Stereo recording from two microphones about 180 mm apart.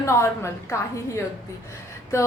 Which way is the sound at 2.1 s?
15° left (ahead or behind).